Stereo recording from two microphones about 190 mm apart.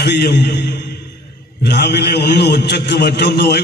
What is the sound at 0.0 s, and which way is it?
A man's voice, 60° left (ahead or behind).